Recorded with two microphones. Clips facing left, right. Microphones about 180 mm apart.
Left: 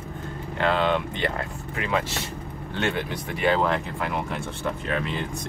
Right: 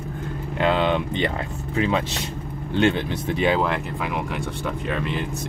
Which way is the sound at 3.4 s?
15° right (ahead or behind).